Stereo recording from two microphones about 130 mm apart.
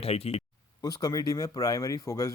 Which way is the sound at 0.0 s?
50° left (ahead or behind).